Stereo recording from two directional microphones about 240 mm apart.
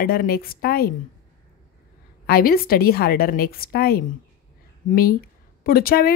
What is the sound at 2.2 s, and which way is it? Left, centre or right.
A woman's voice, left.